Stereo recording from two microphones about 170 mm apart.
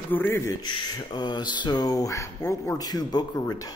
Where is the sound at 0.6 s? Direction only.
25° left (ahead or behind).